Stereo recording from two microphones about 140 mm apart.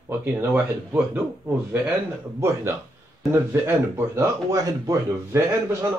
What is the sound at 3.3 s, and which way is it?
Speech, 15° right (ahead or behind).